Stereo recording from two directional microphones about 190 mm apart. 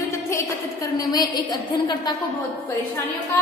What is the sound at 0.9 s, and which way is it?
A woman's voice, 20° left (ahead or behind).